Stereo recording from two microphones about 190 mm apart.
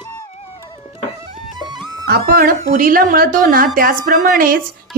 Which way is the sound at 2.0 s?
50° right (ahead or behind).